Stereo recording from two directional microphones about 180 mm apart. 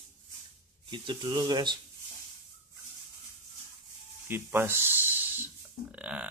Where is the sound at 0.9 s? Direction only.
25° right (ahead or behind).